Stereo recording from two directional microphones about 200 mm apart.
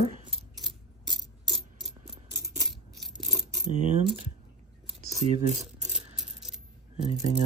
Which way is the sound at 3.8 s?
40° right (ahead or behind).